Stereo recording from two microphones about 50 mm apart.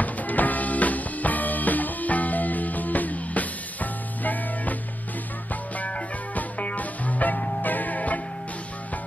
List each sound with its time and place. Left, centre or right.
0.0 s music: left
5.8 s music: left